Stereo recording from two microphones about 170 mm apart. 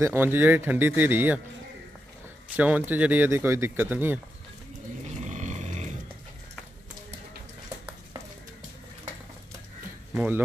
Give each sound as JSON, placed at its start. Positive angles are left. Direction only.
{"t": 0.0, "sound": "speech", "side_deg": -15}
{"t": 2.5, "sound": "speech", "side_deg": -10}
{"t": 5.3, "sound": "grunt", "side_deg": -45}
{"t": 10.1, "sound": "speech", "side_deg": -10}